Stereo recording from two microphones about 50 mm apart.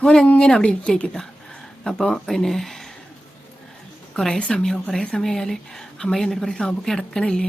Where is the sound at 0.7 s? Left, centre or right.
Left; by 2.9 s centre.